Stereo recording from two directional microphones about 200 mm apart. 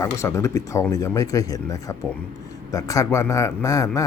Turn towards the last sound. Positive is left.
turn(degrees=15)  # may be behind; listen again after turning